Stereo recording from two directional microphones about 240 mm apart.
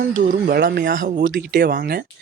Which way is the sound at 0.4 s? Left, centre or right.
Right.